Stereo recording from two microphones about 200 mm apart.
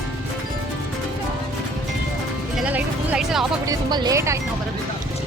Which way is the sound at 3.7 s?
20° right (ahead or behind).